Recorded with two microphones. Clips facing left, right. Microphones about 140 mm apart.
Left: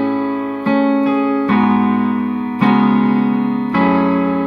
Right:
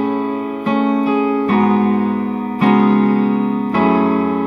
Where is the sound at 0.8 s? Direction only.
35° right (ahead or behind).